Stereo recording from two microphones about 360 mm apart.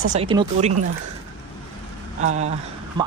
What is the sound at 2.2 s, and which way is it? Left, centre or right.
Speech, centre.